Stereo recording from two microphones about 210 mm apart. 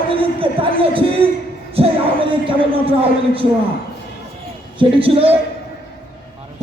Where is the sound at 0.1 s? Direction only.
25° right (ahead or behind).